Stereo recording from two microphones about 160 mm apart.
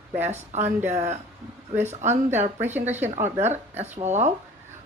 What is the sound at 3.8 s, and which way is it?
Speech, 45° right (ahead or behind).